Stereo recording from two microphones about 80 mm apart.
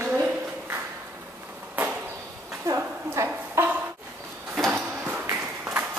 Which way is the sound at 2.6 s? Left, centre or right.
Right.